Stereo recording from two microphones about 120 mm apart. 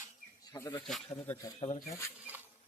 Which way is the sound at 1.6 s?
40° left (ahead or behind).